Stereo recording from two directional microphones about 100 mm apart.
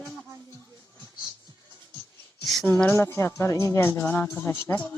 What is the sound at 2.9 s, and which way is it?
Speech, 25° left (ahead or behind).